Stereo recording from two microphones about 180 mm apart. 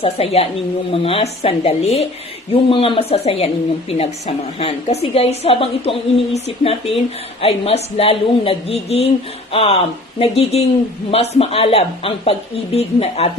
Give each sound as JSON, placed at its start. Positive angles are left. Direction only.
{"t": 0.0, "sound": "a woman's voice", "side_deg": 35}